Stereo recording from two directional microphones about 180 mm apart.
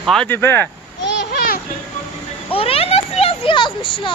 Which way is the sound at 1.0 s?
65° left (ahead or behind).